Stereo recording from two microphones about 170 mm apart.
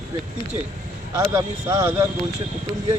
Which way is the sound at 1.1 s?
20° right (ahead or behind).